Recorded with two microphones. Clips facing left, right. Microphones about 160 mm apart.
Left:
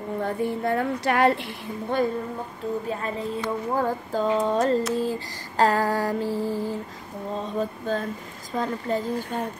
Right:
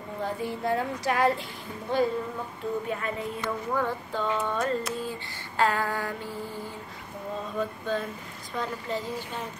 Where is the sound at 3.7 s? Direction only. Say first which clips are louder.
Left 5 dB; 40° left (ahead or behind).